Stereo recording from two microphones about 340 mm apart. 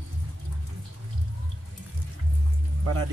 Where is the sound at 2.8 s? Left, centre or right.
Right.